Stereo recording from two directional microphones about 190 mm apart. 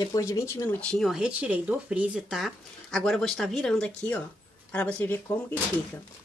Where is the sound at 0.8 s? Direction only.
5° left (ahead or behind).